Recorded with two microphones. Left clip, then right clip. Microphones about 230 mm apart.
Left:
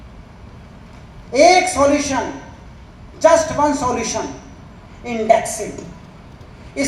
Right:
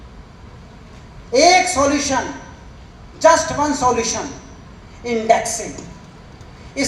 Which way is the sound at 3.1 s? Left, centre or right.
Right.